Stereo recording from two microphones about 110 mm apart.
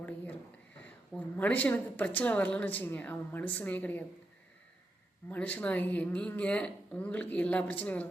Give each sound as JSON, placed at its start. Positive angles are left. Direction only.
{"t": 1.1, "sound": "a woman's voice", "side_deg": 15}
{"t": 5.3, "sound": "a woman's voice", "side_deg": 15}